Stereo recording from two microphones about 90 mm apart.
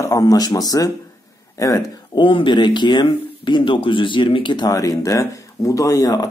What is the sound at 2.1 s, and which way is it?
Speech, 65° left (ahead or behind).